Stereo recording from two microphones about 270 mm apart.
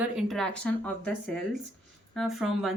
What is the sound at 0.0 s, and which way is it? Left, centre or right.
Speech, centre.